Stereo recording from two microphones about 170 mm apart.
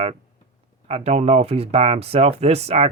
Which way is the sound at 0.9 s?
35° right (ahead or behind).